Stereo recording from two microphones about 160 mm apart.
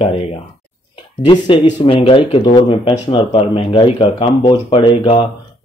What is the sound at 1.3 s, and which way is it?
Speech, 30° left (ahead or behind).